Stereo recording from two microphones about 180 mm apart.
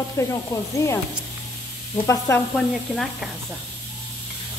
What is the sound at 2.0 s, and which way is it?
Snake, 15° left (ahead or behind).